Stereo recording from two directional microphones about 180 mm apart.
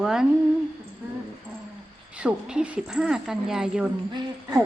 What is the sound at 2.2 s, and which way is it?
A woman's voice, 5° right (ahead or behind).